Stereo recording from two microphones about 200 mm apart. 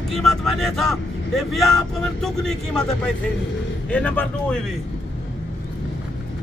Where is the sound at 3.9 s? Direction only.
5° left (ahead or behind).